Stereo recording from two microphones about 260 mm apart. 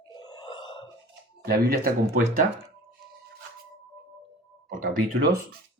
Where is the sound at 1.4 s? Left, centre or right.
Right.